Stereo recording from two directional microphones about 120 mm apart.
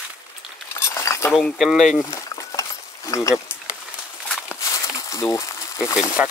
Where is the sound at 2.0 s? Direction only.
25° left (ahead or behind).